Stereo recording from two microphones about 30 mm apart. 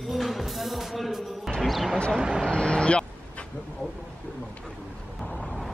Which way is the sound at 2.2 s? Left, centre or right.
Right.